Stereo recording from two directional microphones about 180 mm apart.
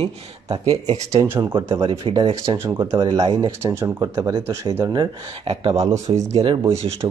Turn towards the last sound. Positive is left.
turn(degrees=-30)  # may be behind; listen again after turning